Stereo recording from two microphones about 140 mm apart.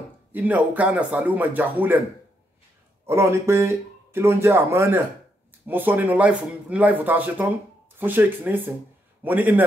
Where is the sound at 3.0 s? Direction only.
20° right (ahead or behind).